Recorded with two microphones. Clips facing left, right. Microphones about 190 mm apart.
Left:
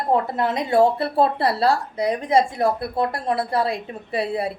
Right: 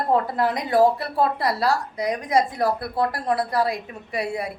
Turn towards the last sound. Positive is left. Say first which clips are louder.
# left 3 dB
turn(degrees=30)  # may be behind; listen again after turning